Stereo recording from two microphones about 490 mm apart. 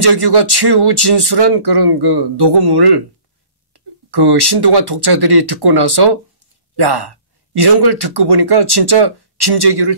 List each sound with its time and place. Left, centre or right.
0.0 s speech: right